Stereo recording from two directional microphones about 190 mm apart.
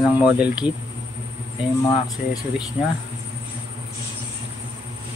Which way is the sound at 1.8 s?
20° left (ahead or behind).